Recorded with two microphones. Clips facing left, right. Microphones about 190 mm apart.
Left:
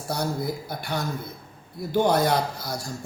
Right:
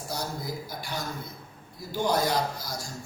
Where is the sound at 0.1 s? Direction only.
60° left (ahead or behind).